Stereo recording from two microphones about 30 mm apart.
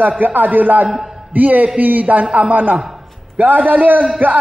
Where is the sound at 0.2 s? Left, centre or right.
Right.